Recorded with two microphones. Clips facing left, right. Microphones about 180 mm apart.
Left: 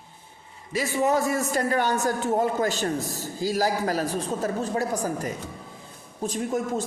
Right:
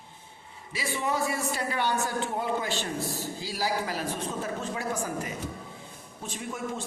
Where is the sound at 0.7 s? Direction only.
45° left (ahead or behind).